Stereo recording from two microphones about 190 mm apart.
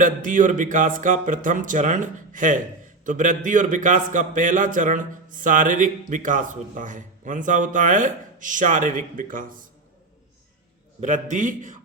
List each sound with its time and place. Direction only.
0.0 s a man's voice: 45° right (ahead or behind)
11.0 s a man's voice: 40° right (ahead or behind)